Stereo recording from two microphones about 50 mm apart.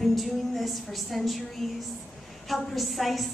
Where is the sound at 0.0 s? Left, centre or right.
Centre.